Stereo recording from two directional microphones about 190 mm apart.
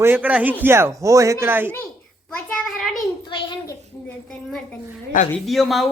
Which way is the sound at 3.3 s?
20° left (ahead or behind).